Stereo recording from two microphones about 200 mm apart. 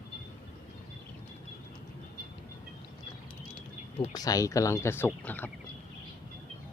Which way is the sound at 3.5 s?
25° left (ahead or behind).